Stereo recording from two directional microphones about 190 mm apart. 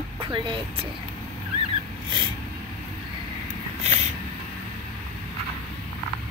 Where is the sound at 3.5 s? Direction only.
35° right (ahead or behind).